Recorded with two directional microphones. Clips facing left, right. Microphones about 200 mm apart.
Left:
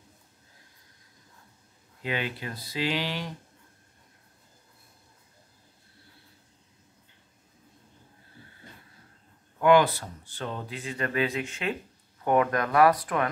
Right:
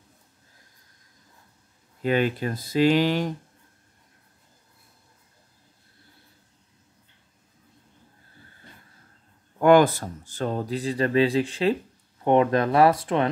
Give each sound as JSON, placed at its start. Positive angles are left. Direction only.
{"t": 2.0, "sound": "speech", "side_deg": -45}
{"t": 9.6, "sound": "speech", "side_deg": -45}